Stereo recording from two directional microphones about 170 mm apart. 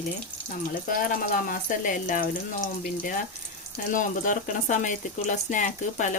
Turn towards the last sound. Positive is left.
turn(degrees=45)  # may be behind; listen again after turning